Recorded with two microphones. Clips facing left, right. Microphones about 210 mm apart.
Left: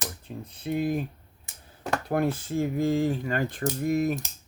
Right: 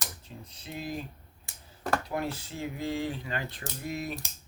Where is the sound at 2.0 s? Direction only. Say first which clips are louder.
Left 7 dB; 55° left (ahead or behind).